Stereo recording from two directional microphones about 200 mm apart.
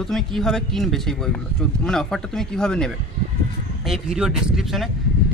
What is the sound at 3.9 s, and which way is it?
Speech, centre (ahead or behind).